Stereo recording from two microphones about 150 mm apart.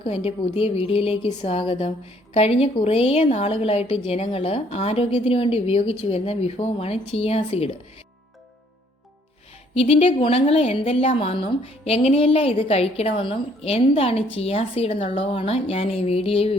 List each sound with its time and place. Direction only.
0.0 s a woman's voice: 40° left (ahead or behind)
9.7 s a woman's voice: 40° left (ahead or behind)